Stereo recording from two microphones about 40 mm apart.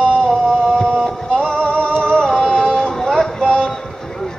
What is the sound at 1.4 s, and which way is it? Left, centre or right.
Music, centre.